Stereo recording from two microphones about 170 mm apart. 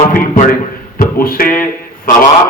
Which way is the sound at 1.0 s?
55° left (ahead or behind).